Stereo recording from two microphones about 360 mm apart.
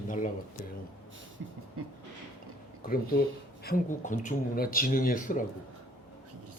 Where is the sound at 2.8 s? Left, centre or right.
Left.